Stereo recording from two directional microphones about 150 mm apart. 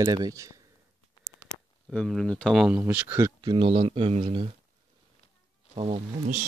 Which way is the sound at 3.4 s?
35° right (ahead or behind).